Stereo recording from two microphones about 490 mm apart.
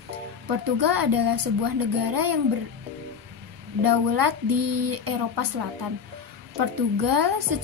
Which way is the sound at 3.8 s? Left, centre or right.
Right.